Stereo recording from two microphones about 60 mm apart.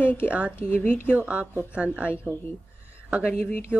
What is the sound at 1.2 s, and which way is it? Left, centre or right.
Speech, right.